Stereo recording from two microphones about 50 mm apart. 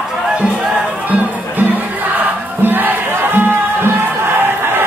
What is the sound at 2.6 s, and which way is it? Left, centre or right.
Music, right.